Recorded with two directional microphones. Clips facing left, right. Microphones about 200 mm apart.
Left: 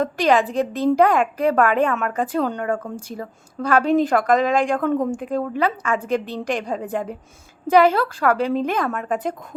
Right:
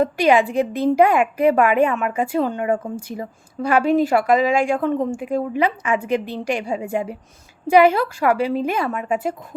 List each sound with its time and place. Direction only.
0.0 s a woman's voice: 10° right (ahead or behind)
0.7 s a woman's voice: 40° left (ahead or behind)
0.9 s a woman's voice: 10° right (ahead or behind)
2.6 s a woman's voice: 15° right (ahead or behind)